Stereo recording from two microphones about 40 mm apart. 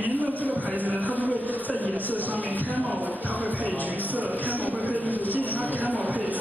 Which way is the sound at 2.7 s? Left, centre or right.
Right.